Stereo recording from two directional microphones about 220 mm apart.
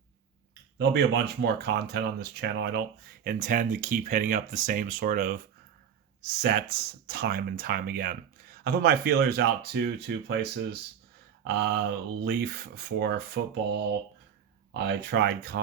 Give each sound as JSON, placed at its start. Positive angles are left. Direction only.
{"t": 0.8, "sound": "speech", "side_deg": -50}
{"t": 12.2, "sound": "speech", "side_deg": -45}